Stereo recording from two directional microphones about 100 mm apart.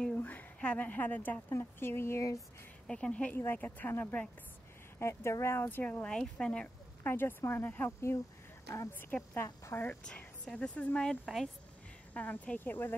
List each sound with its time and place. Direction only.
0.0 s a woman's voice: 15° left (ahead or behind); by 2.4 s 30° left (ahead or behind)
2.9 s speech: 10° left (ahead or behind)
4.9 s a woman's voice: 30° left (ahead or behind)
6.0 s speech: 10° left (ahead or behind)
7.0 s a woman's voice: 20° left (ahead or behind)
9.8 s a woman's voice: 10° left (ahead or behind)
12.1 s speech: 15° left (ahead or behind)